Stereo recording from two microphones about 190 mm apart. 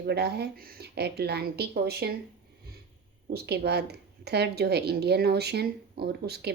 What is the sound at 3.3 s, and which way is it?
Speech, 60° right (ahead or behind).